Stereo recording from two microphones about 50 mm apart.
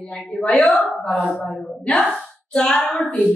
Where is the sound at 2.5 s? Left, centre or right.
Centre.